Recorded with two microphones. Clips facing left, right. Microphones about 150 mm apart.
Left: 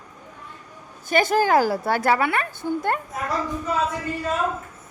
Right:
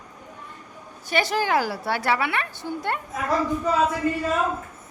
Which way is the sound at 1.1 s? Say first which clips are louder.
Left 4 dB; 45° left (ahead or behind).